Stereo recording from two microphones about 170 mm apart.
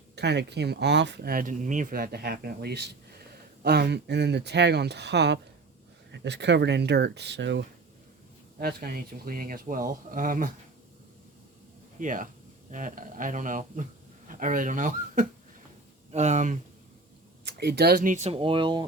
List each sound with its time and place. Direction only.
0.2 s speech: 80° right
8.5 s speech: 60° right (ahead or behind)
11.9 s speech: 50° right (ahead or behind)
17.4 s speech: 80° right; by 18.9 s 30° right (ahead or behind)